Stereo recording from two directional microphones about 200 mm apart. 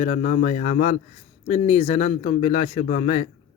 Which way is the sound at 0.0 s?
40° left (ahead or behind).